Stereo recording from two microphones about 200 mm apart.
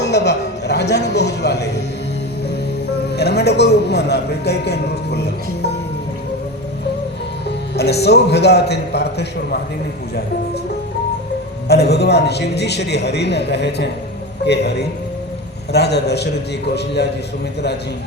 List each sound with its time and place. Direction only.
0.0 s a man's voice: 60° left (ahead or behind)
3.2 s a man's voice: 55° left (ahead or behind)
7.8 s a man's voice: 55° left (ahead or behind)
11.7 s a man's voice: 55° left (ahead or behind)